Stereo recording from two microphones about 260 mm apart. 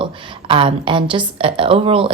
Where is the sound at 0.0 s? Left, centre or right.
Centre.